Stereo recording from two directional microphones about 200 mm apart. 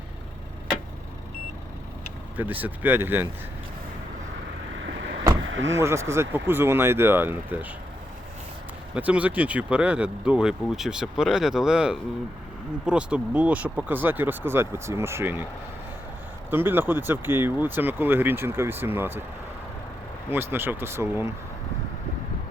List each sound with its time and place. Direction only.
2.3 s speech: 10° right (ahead or behind)
5.4 s a sound: 70° right (ahead or behind)
5.7 s speech: 15° right (ahead or behind)
9.0 s speech: 5° right (ahead or behind)
16.5 s speech: 10° right (ahead or behind)
20.3 s speech: 10° right (ahead or behind)